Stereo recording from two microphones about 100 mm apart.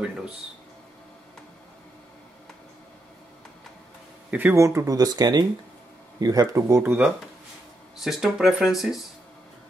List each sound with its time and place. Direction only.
4.3 s speech: 20° right (ahead or behind)
4.6 s speech: 30° right (ahead or behind)
6.8 s speech: 15° right (ahead or behind)
8.0 s speech: 5° right (ahead or behind)